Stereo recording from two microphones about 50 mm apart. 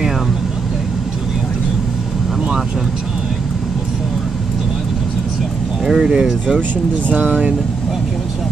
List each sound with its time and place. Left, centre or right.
5.9 s speech: centre
7.2 s speech: right